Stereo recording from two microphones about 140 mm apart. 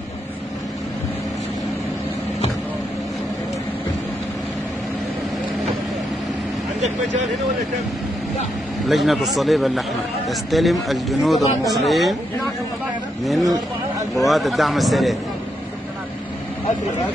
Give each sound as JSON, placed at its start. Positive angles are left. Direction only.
{"t": 6.8, "sound": "vehicle", "side_deg": -55}
{"t": 8.8, "sound": "speech", "side_deg": 0}
{"t": 13.2, "sound": "speech", "side_deg": 0}